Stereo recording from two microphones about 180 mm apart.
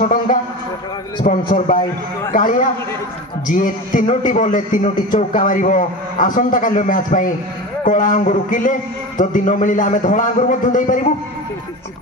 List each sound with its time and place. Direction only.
0.0 s a man's voice: 50° left (ahead or behind)